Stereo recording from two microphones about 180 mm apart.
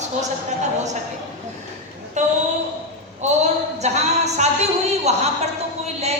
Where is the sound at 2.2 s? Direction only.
40° right (ahead or behind).